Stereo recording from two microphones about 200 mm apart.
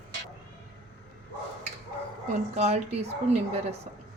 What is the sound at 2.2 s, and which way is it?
Speech, 35° right (ahead or behind).